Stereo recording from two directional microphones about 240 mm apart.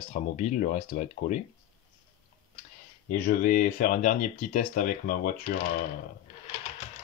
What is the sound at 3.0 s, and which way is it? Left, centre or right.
Speech, left.